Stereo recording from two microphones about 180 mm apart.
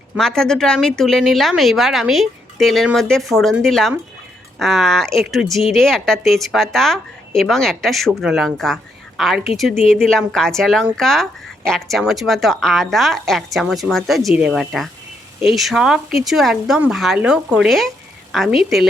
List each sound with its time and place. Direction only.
0.2 s speech: 5° left (ahead or behind)